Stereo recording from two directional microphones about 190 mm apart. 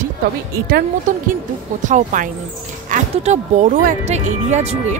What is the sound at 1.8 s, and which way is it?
Speech, 40° right (ahead or behind).